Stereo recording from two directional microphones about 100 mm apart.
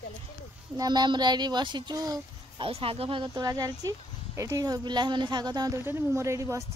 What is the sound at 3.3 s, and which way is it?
Speech, 40° right (ahead or behind).